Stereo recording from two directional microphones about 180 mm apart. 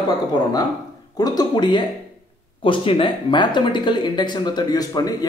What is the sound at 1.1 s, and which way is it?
Speech, 20° left (ahead or behind).